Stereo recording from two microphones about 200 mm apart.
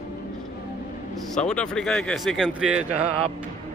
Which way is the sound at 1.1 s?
5° left (ahead or behind).